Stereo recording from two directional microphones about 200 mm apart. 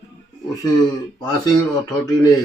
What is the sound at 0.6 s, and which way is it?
Speech, 20° left (ahead or behind).